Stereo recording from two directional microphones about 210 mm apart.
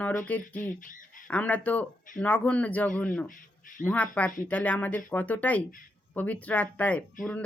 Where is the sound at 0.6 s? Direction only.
40° left (ahead or behind).